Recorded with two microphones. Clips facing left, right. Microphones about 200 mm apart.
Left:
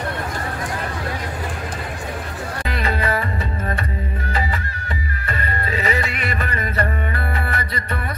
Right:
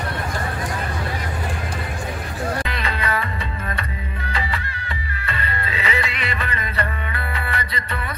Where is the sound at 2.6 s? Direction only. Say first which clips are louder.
Left 3 dB; 40° left (ahead or behind).